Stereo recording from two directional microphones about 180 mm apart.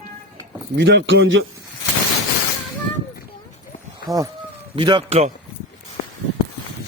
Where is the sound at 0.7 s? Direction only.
85° right.